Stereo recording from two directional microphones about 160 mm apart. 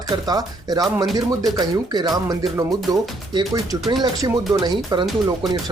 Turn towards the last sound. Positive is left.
turn(degrees=-25)  # may be behind; listen again after turning